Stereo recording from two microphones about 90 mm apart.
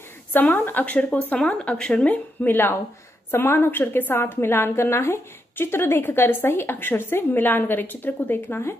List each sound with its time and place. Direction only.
0.3 s speech: 20° left (ahead or behind)
2.4 s a woman's voice: 25° left (ahead or behind)